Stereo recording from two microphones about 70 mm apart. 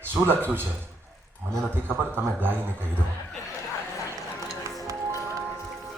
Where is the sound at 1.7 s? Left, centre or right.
Right.